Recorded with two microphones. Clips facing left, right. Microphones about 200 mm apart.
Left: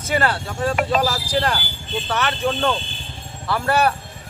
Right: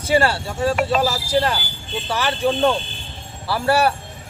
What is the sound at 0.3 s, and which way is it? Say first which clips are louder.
Speech: right 2 dB; 5° right (ahead or behind).